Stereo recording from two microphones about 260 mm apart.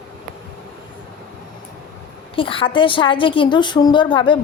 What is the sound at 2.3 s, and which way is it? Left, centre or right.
A woman's voice, centre.